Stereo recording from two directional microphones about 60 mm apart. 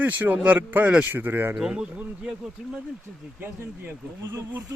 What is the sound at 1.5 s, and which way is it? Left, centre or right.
Speech, centre.